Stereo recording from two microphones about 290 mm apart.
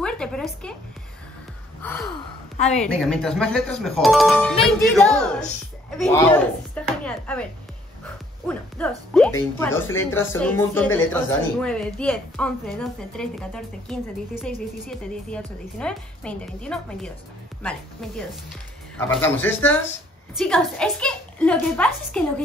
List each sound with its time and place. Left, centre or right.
0.0 s a sound: centre
1.8 s speech: centre
2.5 s a woman's voice: left
2.8 s a woman's voice: centre
8.5 s a woman's voice: centre